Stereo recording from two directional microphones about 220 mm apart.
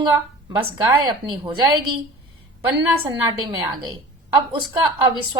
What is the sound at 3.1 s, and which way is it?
Speech, 20° right (ahead or behind).